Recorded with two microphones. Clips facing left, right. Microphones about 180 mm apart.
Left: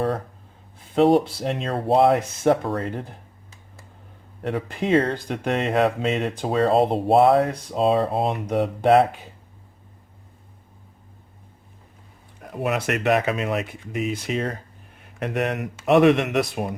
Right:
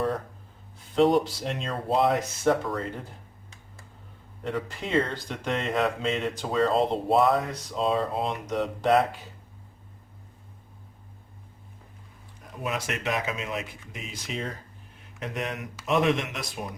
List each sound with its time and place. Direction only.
1.1 s speech: 55° left (ahead or behind)
4.4 s speech: 60° left (ahead or behind)
12.4 s speech: 65° left (ahead or behind)